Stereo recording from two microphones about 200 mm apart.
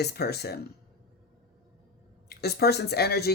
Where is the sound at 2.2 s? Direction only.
55° left (ahead or behind).